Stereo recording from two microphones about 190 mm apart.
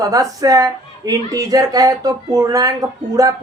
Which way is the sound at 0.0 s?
20° right (ahead or behind).